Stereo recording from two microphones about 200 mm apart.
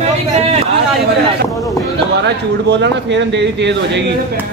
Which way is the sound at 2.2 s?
60° right (ahead or behind).